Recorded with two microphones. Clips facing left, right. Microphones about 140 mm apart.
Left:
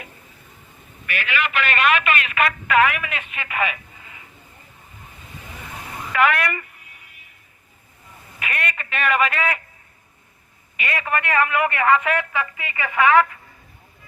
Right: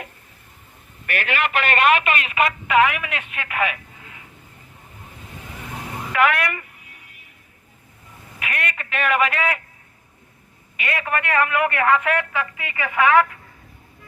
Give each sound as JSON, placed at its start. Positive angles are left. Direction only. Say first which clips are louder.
{"t": 1.0, "sound": "a man's voice", "louder": "right 2 dB", "side_deg": -50}
{"t": 2.6, "sound": "speech", "louder": "even", "side_deg": -10}
{"t": 6.1, "sound": "speech", "louder": "even", "side_deg": -5}
{"t": 8.4, "sound": "a man's voice", "louder": "even", "side_deg": -5}
{"t": 10.8, "sound": "a man's voice", "louder": "even", "side_deg": -5}